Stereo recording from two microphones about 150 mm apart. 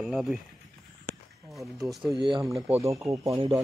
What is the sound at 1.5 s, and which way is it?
Speech, centre (ahead or behind).